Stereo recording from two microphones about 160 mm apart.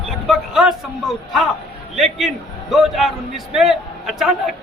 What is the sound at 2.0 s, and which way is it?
A man's voice, centre (ahead or behind).